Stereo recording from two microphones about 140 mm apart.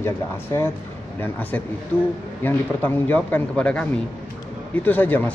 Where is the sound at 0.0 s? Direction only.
20° left (ahead or behind).